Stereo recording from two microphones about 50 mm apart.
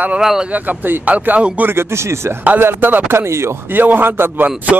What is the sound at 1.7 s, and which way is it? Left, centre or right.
Speech, right.